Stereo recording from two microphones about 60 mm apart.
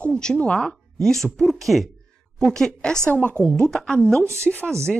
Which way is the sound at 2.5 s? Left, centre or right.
Centre.